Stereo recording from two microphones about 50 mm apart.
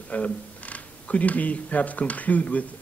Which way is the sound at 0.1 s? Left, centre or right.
Left.